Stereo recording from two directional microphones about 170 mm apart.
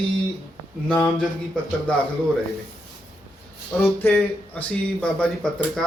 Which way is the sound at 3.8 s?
15° left (ahead or behind).